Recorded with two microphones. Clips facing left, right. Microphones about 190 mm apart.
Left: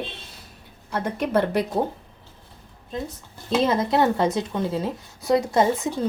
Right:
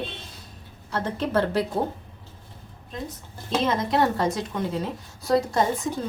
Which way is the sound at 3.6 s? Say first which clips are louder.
Left 3 dB; 35° left (ahead or behind).